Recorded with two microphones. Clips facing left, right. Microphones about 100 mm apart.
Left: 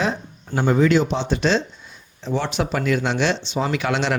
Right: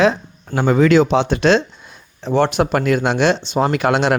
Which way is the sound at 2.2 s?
55° right (ahead or behind).